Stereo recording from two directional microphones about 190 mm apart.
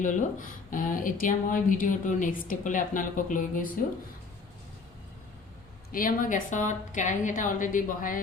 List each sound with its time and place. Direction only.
0.0 s a woman's voice: 40° left (ahead or behind)
5.9 s a woman's voice: 45° left (ahead or behind)